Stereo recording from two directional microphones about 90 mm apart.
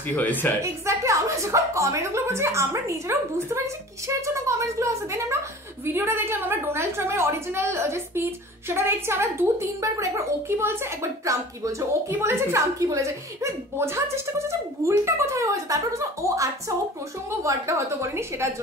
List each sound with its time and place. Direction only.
0.1 s a woman's voice: 20° left (ahead or behind)
0.6 s a woman's voice: 35° right (ahead or behind)